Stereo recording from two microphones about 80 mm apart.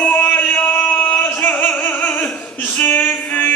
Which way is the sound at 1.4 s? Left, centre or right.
Left.